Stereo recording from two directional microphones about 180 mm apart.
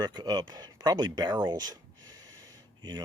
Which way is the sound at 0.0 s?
20° right (ahead or behind).